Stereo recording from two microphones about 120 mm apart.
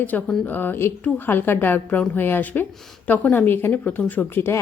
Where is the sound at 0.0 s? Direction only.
15° left (ahead or behind).